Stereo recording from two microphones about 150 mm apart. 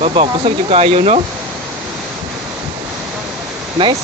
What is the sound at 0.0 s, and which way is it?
Speech, 35° right (ahead or behind).